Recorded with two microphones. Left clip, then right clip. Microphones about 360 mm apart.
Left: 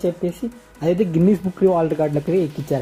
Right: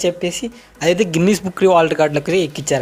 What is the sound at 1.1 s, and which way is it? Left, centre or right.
Speech, right.